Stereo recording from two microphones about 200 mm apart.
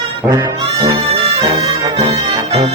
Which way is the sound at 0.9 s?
30° right (ahead or behind).